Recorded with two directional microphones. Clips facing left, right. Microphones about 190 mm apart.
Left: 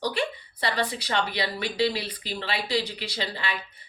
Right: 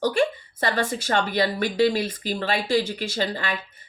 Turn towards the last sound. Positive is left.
turn(degrees=-45)  # may be behind; listen again after turning